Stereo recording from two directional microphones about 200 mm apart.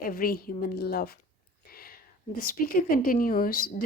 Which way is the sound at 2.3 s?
45° left (ahead or behind).